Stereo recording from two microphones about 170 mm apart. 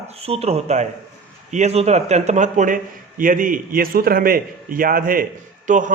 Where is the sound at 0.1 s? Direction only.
35° right (ahead or behind).